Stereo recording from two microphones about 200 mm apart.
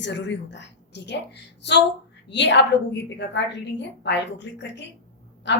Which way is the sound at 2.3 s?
60° left (ahead or behind).